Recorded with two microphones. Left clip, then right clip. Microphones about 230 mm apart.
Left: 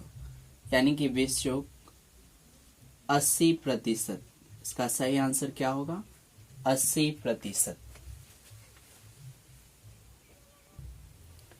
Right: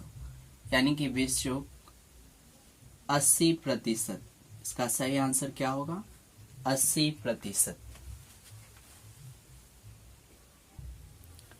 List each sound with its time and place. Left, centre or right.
0.7 s a woman's voice: centre
3.1 s a woman's voice: centre